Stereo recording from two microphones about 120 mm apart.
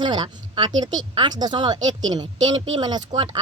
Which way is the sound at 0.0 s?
40° right (ahead or behind).